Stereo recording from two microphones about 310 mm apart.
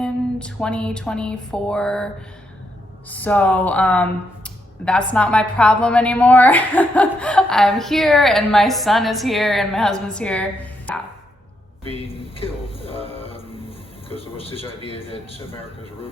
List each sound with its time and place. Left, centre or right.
0.0 s speech: centre
3.1 s speech: centre
12.0 s music: centre
14.4 s a man's voice: centre